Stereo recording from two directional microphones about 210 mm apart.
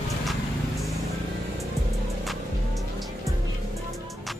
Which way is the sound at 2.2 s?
Centre (ahead or behind).